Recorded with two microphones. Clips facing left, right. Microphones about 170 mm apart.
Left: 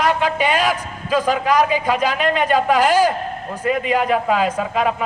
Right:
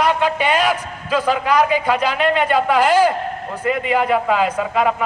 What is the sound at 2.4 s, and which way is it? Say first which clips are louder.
A man's voice: left 2 dB; 15° left (ahead or behind).